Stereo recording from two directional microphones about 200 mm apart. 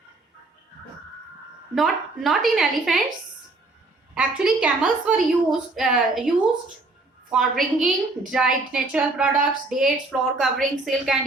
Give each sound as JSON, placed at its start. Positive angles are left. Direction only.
{"t": 1.7, "sound": "a woman's voice", "side_deg": 0}
{"t": 4.1, "sound": "a woman's voice", "side_deg": -5}